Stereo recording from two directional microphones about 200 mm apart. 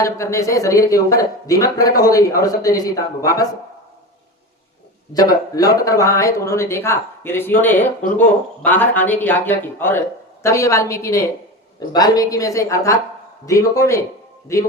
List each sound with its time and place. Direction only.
0.0 s speech: 15° left (ahead or behind)
5.1 s speech: 20° left (ahead or behind)